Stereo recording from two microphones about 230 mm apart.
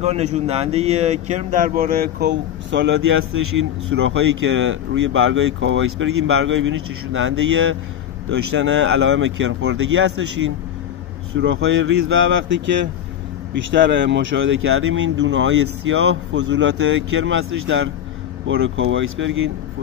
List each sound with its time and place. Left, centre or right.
0.0 s speech: right